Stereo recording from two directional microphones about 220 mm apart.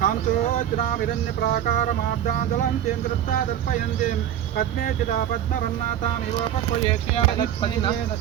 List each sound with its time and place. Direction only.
0.0 s a sound: 40° left (ahead or behind)
1.4 s speech: 40° left (ahead or behind)
6.8 s speech: 25° left (ahead or behind)